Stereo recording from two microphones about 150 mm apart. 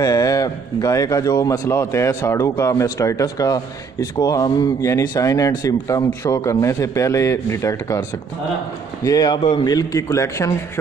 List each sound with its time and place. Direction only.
0.0 s speech: 25° left (ahead or behind)
9.0 s speech: 25° left (ahead or behind)